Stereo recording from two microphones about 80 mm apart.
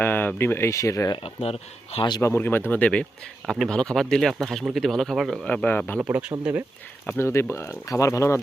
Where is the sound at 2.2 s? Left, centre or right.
Left.